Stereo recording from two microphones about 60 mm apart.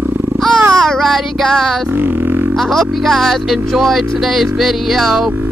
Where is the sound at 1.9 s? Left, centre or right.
Right.